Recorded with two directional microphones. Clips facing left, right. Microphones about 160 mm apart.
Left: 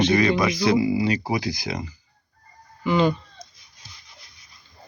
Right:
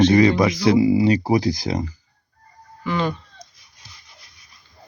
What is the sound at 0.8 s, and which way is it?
Speech, 30° right (ahead or behind).